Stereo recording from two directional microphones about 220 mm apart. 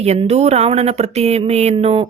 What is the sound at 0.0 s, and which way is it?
Speech, 30° right (ahead or behind).